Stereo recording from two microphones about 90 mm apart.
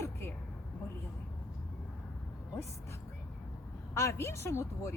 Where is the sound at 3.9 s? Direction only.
30° left (ahead or behind).